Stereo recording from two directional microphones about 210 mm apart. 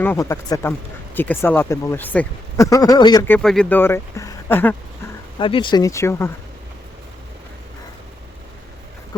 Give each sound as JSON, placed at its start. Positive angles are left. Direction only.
{"t": 0.0, "sound": "speech", "side_deg": 10}
{"t": 3.2, "sound": "speech", "side_deg": 5}
{"t": 5.4, "sound": "speech", "side_deg": 25}